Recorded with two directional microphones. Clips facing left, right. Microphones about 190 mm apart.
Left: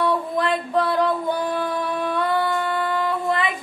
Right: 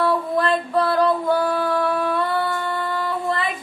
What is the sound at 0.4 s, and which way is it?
Singing, 20° left (ahead or behind).